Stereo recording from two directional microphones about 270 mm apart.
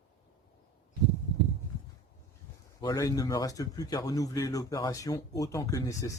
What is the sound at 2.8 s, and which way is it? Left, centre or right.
Speech, centre.